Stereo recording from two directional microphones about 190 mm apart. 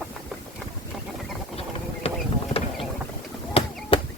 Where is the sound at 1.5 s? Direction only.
30° left (ahead or behind).